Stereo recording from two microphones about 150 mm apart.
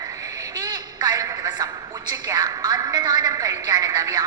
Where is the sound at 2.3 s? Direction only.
25° right (ahead or behind).